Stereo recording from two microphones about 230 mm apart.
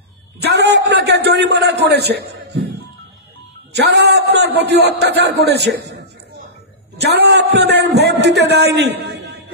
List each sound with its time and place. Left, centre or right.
0.4 s a man's voice: right
3.7 s a man's voice: right